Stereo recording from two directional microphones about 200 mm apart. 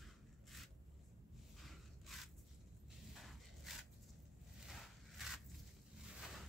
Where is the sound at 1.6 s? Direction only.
Centre (ahead or behind).